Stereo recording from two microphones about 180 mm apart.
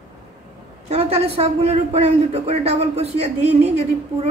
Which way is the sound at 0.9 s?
35° right (ahead or behind).